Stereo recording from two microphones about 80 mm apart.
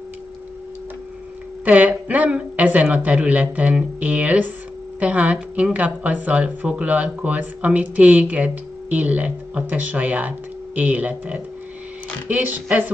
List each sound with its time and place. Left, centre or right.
1.6 s speech: centre